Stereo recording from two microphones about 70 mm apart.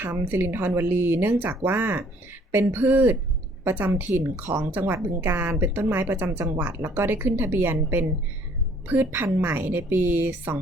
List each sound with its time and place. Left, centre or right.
0.0 s a woman's voice: right
4.2 s speech: right
4.7 s a woman's voice: right